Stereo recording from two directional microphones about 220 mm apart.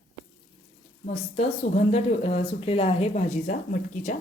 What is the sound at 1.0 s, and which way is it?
A woman's voice, 30° left (ahead or behind).